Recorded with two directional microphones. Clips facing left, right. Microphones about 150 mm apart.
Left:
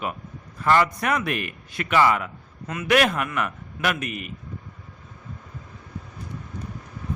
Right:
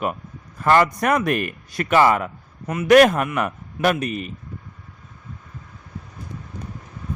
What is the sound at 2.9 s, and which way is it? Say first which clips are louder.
Speech: right 8 dB; 45° right (ahead or behind).